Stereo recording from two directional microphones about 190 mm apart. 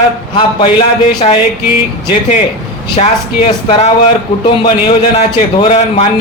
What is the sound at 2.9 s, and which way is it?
A man's voice, 30° left (ahead or behind).